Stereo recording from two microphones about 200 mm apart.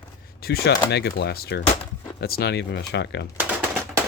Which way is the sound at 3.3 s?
10° right (ahead or behind).